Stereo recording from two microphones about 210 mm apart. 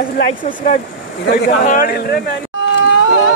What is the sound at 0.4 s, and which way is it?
Speech, 40° left (ahead or behind).